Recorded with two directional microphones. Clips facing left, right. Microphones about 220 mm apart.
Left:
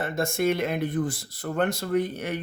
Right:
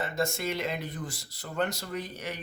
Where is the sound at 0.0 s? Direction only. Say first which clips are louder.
Left 6 dB; 55° left (ahead or behind).